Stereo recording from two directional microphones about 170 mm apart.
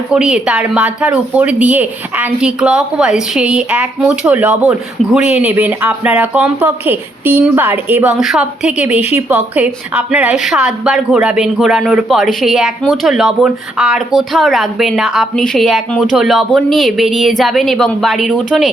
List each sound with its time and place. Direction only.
0.1 s speech: 5° right (ahead or behind)
9.0 s a woman's voice: 40° left (ahead or behind)
9.3 s a woman's voice: 5° right (ahead or behind)